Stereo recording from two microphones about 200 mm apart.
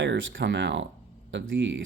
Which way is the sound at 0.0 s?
65° right (ahead or behind).